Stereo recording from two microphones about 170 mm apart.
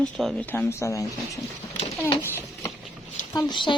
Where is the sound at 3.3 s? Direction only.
25° left (ahead or behind).